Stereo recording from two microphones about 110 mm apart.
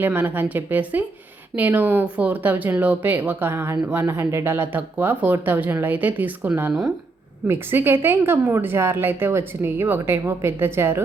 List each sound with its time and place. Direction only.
0.0 s a woman's voice: 15° right (ahead or behind)